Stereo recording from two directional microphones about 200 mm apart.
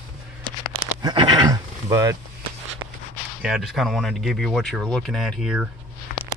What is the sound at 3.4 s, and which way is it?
Speech, centre (ahead or behind).